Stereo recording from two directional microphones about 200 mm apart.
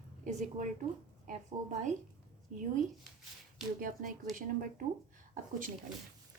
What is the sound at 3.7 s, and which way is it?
Speech, 45° right (ahead or behind).